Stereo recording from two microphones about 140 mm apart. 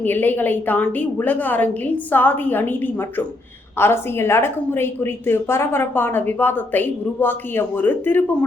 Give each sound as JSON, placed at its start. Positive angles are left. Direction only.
{"t": 0.0, "sound": "a woman's voice", "side_deg": 15}